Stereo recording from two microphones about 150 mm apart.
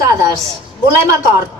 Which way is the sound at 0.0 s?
20° right (ahead or behind).